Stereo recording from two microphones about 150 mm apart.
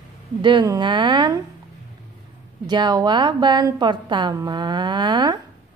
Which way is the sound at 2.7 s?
30° right (ahead or behind).